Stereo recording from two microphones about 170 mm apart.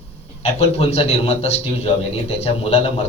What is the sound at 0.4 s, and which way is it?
A man's voice, 40° left (ahead or behind).